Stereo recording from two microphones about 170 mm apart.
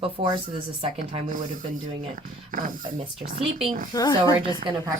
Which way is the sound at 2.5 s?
50° right (ahead or behind).